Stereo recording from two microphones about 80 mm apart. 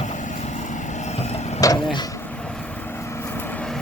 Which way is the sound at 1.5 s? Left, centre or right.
Left.